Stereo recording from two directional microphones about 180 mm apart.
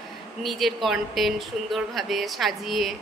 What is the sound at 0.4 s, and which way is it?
Speech, centre (ahead or behind).